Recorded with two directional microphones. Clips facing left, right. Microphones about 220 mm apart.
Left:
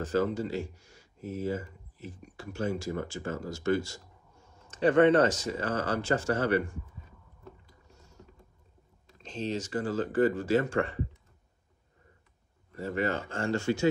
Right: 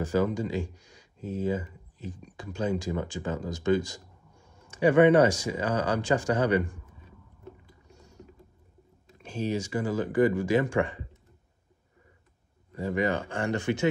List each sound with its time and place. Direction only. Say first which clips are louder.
0.0 s speech: right 2 dB; 15° right (ahead or behind)
9.2 s speech: right 3 dB; 10° right (ahead or behind)
12.7 s speech: right 3 dB; 15° right (ahead or behind)